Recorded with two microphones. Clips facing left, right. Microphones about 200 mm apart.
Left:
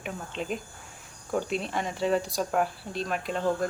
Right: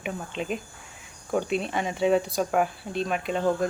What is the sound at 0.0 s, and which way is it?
Speech, 5° right (ahead or behind).